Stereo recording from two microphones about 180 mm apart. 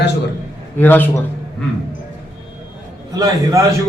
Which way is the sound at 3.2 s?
20° right (ahead or behind).